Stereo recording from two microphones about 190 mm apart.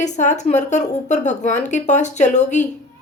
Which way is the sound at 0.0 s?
40° left (ahead or behind).